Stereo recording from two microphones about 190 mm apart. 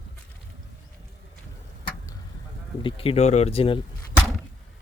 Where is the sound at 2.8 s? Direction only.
30° left (ahead or behind).